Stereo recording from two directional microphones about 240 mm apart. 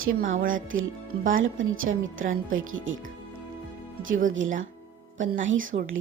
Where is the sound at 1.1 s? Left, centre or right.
Right.